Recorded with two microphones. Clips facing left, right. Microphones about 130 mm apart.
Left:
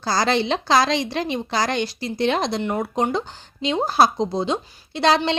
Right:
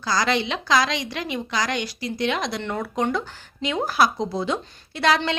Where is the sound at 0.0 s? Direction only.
30° left (ahead or behind).